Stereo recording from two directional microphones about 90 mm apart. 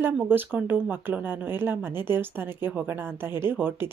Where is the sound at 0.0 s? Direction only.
20° right (ahead or behind).